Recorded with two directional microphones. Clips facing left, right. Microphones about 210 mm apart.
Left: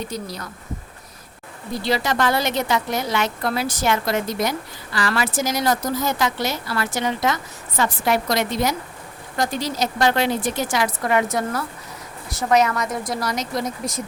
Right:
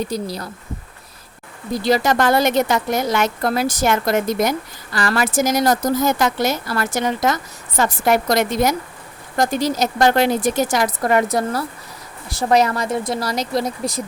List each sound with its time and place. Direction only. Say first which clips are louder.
0.1 s a woman's voice: right 5 dB; 35° right (ahead or behind)
1.7 s a woman's voice: right 5 dB; 45° right (ahead or behind)